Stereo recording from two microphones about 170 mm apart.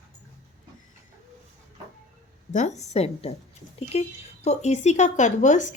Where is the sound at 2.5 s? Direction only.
45° left (ahead or behind).